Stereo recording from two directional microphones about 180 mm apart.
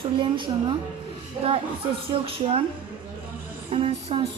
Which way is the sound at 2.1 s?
30° right (ahead or behind).